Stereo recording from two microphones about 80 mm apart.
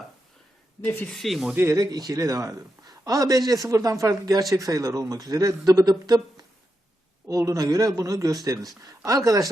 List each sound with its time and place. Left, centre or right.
0.8 s speech: left
1.1 s speech: centre
1.5 s speech: right
1.8 s a man's voice: right
7.3 s a man's voice: right